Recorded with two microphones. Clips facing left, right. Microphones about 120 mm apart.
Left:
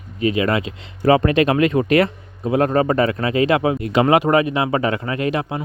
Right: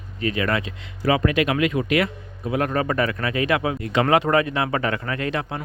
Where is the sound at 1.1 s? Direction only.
35° left (ahead or behind).